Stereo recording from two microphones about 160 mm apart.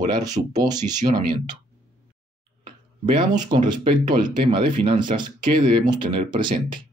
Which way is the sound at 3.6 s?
50° right (ahead or behind).